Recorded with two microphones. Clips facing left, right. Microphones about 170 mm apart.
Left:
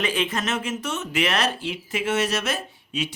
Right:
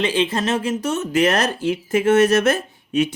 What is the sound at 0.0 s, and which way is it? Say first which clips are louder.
Speech: right 5 dB; 30° right (ahead or behind).